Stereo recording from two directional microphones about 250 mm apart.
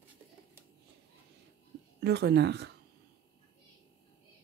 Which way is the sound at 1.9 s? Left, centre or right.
Right.